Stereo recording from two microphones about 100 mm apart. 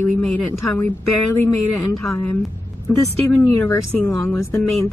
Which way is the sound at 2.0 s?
25° left (ahead or behind).